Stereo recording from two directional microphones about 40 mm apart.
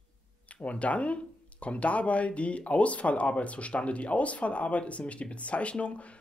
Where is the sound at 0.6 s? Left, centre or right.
Left.